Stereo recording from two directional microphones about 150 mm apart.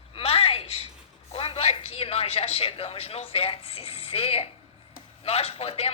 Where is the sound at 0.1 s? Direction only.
40° left (ahead or behind).